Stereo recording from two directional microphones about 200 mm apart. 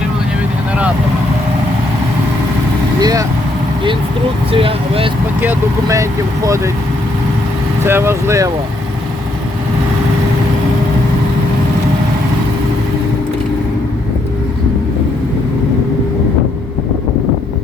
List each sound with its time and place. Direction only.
3.0 s speech: 20° right (ahead or behind)
4.5 s speech: 25° right (ahead or behind)
5.4 s speech: 15° right (ahead or behind)
7.9 s speech: 10° right (ahead or behind)